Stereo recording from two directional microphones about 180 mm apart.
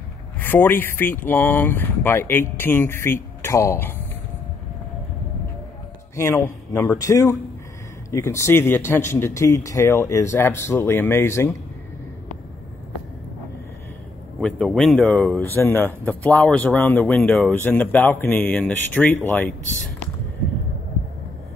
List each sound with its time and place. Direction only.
0.4 s speech: 10° left (ahead or behind)
6.1 s speech: 15° left (ahead or behind)
14.4 s speech: 5° left (ahead or behind)